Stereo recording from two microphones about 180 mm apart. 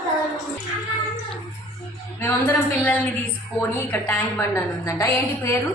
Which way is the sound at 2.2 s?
10° left (ahead or behind).